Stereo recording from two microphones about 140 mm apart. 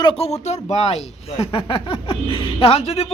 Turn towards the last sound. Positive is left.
turn(degrees=45)  # may be behind; listen again after turning